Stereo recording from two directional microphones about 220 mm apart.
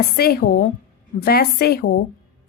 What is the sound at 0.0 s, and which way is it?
Speech, 45° left (ahead or behind).